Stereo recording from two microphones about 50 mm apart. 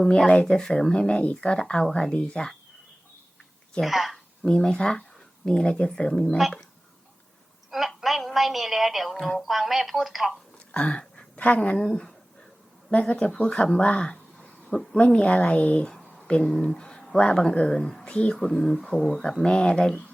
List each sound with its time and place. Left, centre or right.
0.0 s speech: centre
3.8 s speech: centre
4.4 s speech: centre
7.7 s a woman's voice: centre
10.7 s speech: left
11.8 s speech: centre
12.9 s speech: left
14.4 s a sound: centre
14.9 s speech: left
15.9 s a sound: centre
16.2 s speech: centre
18.3 s speech: centre
19.5 s speech: centre